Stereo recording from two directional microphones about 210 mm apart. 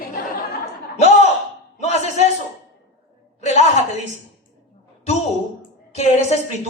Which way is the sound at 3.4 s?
30° left (ahead or behind).